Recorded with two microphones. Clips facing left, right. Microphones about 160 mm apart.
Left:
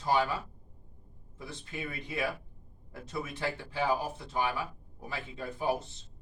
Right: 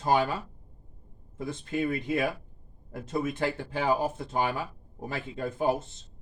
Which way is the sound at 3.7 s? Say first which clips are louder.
Right 2 dB; 50° right (ahead or behind).